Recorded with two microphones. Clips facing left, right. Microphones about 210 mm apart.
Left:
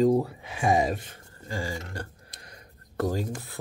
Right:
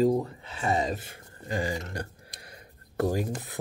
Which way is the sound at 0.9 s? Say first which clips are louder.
Left 1 dB; 5° right (ahead or behind).